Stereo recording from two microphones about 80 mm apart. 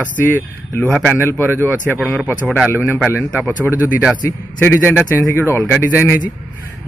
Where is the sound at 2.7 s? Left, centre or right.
Left.